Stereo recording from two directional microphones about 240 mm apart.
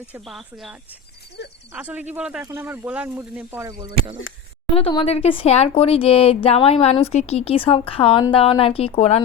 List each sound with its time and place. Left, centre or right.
0.1 s speech: centre
1.4 s a sound: left
1.7 s speech: centre
4.7 s speech: left